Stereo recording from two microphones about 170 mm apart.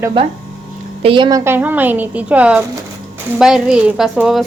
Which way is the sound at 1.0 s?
30° right (ahead or behind).